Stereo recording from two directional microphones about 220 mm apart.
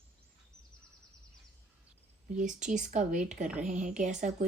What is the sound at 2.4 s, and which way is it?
Speech, 35° right (ahead or behind).